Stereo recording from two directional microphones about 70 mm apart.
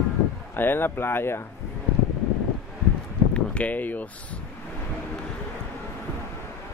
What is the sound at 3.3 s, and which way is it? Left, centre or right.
Speech, centre.